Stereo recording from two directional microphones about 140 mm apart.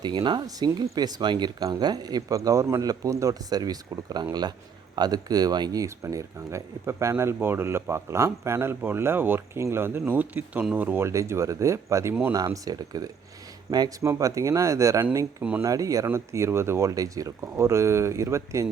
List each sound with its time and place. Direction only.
0.0 s speech: 30° right (ahead or behind)